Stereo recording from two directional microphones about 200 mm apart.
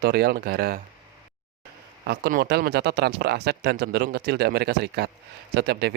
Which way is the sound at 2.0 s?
55° right (ahead or behind).